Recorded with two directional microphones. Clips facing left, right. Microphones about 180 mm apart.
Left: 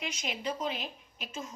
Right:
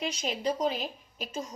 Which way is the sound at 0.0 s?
35° right (ahead or behind).